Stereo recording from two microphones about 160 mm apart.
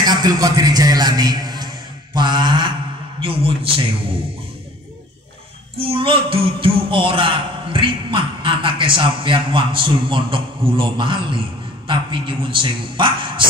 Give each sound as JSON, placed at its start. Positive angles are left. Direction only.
{"t": 0.0, "sound": "a man's voice", "side_deg": -25}
{"t": 2.1, "sound": "mantra", "side_deg": -30}
{"t": 3.2, "sound": "a man's voice", "side_deg": -35}
{"t": 5.8, "sound": "a man's voice", "side_deg": -35}